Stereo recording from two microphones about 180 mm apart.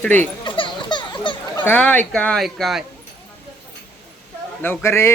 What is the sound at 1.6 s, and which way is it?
Speech, 10° left (ahead or behind).